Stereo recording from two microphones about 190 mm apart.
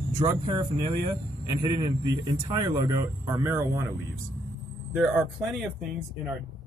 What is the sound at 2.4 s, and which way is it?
Speech, 20° right (ahead or behind).